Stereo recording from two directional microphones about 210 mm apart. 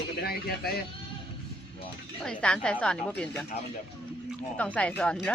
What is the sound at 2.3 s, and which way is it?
A woman's voice, 5° left (ahead or behind).